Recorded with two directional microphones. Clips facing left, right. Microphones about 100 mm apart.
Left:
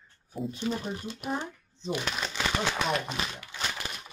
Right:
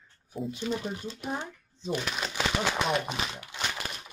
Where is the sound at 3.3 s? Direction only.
20° right (ahead or behind).